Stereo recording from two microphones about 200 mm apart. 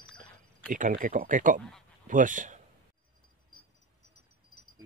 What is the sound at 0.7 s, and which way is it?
Speech, 40° right (ahead or behind).